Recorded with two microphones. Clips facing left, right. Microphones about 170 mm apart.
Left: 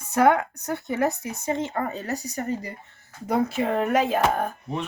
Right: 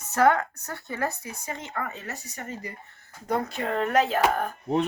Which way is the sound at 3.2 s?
5° left (ahead or behind).